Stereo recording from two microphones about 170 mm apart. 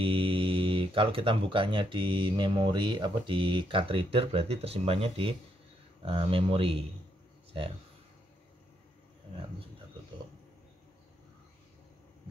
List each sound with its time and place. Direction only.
0.0 s speech: 30° right (ahead or behind)